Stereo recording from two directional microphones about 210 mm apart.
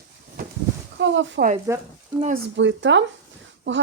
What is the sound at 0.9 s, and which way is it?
Speech, 60° right (ahead or behind).